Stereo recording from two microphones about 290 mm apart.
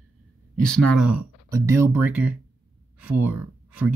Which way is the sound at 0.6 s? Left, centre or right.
Centre.